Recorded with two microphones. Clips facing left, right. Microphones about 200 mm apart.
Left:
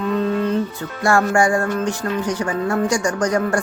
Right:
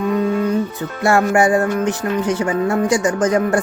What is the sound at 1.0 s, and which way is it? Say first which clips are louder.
Music: right 2 dB; 20° right (ahead or behind).